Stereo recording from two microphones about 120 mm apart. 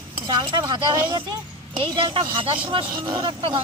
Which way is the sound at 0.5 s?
40° right (ahead or behind).